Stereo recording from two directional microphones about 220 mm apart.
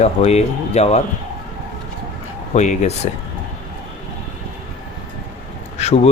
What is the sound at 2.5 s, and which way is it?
Speech, 30° left (ahead or behind).